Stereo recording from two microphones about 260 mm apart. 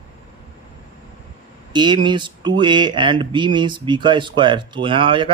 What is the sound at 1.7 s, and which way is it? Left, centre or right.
Speech, centre.